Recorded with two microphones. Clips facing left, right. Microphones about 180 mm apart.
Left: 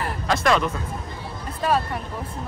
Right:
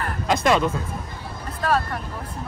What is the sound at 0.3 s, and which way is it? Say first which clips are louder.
Speech: right 1 dB; 20° right (ahead or behind).